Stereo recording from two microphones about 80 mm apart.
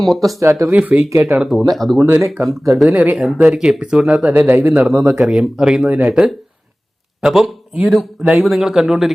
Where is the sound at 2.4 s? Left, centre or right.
Right.